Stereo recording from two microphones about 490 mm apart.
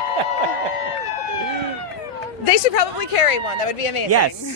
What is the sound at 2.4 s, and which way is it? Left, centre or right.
Speech, left.